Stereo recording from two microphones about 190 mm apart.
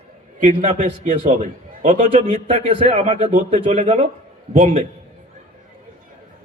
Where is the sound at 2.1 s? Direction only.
30° right (ahead or behind).